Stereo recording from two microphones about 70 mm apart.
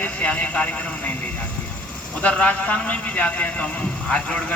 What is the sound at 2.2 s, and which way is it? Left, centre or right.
A man's voice, centre.